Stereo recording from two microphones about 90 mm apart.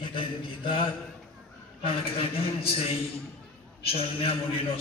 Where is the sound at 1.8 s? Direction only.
90° left.